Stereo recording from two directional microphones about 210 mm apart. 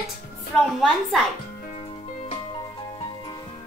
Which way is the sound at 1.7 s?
30° left (ahead or behind).